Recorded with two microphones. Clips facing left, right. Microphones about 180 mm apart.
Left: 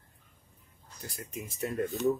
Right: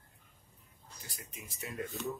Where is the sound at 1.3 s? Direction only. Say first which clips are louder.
Left 9 dB; centre (ahead or behind).